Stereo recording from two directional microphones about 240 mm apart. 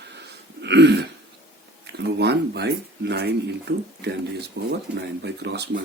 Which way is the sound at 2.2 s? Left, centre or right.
Right.